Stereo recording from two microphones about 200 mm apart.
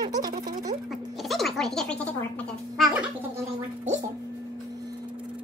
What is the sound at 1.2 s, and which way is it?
Speech, centre (ahead or behind).